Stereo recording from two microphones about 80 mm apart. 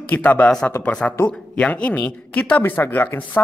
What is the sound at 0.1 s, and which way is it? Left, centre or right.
Speech, centre.